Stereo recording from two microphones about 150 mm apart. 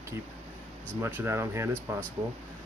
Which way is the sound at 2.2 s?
40° right (ahead or behind).